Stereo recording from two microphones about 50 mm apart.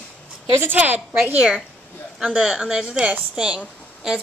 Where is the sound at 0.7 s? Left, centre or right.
Right.